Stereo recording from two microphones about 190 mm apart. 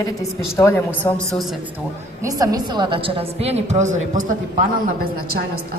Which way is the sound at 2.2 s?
20° right (ahead or behind).